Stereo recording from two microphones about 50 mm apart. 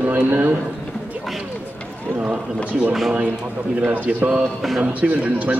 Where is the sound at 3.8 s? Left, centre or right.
Right.